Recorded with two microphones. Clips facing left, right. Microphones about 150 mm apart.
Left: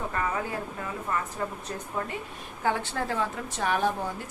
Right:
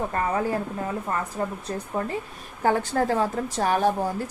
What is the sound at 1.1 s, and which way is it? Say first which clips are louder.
A woman's voice: right 3 dB; 40° right (ahead or behind).